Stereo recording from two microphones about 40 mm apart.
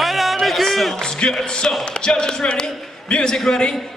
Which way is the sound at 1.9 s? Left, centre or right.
Centre.